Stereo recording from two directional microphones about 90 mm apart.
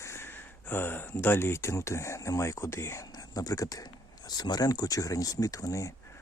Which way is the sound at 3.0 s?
45° left (ahead or behind).